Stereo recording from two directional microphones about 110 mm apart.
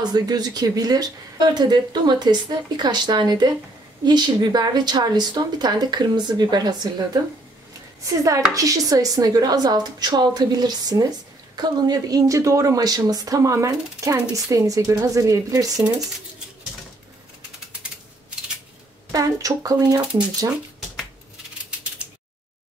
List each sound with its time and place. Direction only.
0.0 s speech: 35° right (ahead or behind)
8.1 s speech: 30° right (ahead or behind)
19.1 s speech: 30° right (ahead or behind)